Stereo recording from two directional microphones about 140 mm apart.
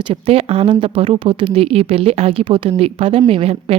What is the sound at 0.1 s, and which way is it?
Speech, 45° right (ahead or behind).